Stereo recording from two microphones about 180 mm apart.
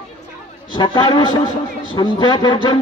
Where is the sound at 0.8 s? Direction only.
25° left (ahead or behind).